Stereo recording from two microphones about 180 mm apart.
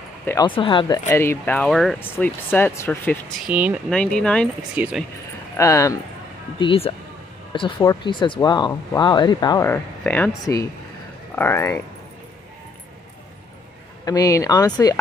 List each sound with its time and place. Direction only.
0.2 s speech: 15° left (ahead or behind)
0.5 s speech: 30° left (ahead or behind)
3.5 s speech: 10° right (ahead or behind)
3.9 s speech: 5° left (ahead or behind)
4.8 s speech: 10° right (ahead or behind)
5.6 s speech: 15° left (ahead or behind)
6.6 s speech: 30° left (ahead or behind)
9.7 s speech: 10° left (ahead or behind)
14.0 s speech: 20° left (ahead or behind)